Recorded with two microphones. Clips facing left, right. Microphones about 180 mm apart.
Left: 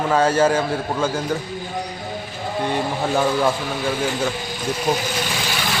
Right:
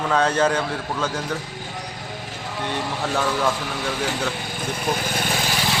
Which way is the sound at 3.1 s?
15° left (ahead or behind).